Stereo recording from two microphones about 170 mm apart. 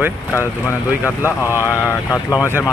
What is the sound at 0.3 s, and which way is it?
Speech, 15° left (ahead or behind).